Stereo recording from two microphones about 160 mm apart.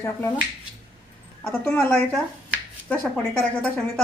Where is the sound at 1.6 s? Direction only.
10° left (ahead or behind).